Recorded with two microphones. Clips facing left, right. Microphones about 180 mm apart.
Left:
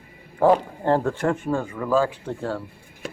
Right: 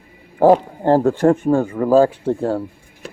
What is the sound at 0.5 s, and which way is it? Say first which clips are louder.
Speech: right 6 dB; 35° right (ahead or behind).